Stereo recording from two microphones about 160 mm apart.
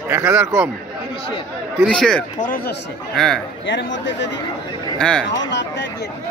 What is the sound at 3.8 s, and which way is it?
Speech, 90° left.